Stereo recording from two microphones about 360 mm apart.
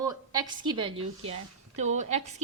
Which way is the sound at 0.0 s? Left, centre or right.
Centre.